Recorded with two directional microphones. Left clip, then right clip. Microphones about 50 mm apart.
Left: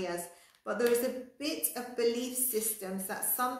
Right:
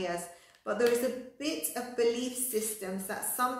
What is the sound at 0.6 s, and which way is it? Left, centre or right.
A woman's voice, left.